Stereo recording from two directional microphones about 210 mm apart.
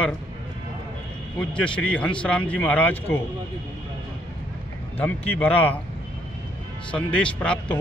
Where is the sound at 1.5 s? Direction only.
5° left (ahead or behind).